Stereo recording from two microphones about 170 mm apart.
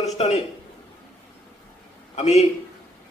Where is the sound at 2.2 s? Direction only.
45° left (ahead or behind).